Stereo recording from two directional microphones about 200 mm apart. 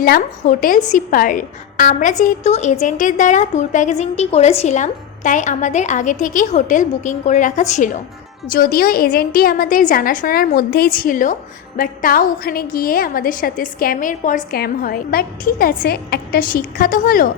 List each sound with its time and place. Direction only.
0.0 s a woman's voice: 45° left (ahead or behind)